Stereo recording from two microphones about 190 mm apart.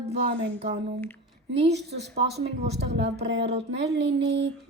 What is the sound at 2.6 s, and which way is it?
Speech, 35° right (ahead or behind).